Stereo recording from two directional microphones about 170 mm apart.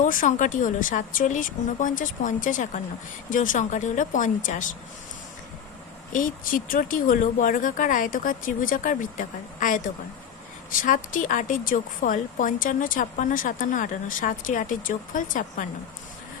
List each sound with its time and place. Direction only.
0.0 s a woman's voice: 50° left (ahead or behind)
6.1 s a woman's voice: 55° left (ahead or behind)